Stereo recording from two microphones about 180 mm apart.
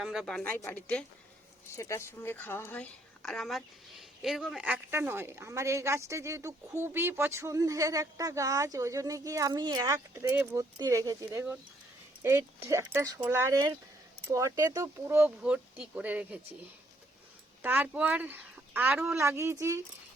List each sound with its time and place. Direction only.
0.0 s a woman's voice: 5° right (ahead or behind)
17.6 s speech: 10° right (ahead or behind)